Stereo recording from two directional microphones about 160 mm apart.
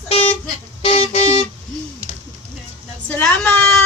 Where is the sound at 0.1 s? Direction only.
40° left (ahead or behind).